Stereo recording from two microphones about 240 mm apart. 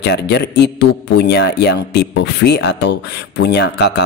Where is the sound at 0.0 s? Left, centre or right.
Left.